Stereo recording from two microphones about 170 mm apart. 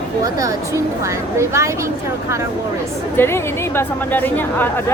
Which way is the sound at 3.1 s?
15° left (ahead or behind).